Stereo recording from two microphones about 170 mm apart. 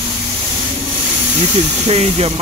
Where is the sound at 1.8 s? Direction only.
40° right (ahead or behind).